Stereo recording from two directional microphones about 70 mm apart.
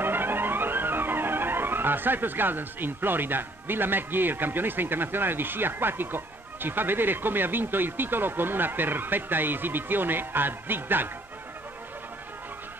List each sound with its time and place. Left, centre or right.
0.0 s music: right